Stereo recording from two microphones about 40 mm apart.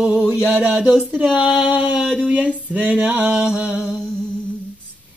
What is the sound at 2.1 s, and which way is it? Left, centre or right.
Music, right.